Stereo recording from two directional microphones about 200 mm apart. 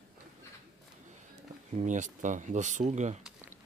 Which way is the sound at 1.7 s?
40° right (ahead or behind).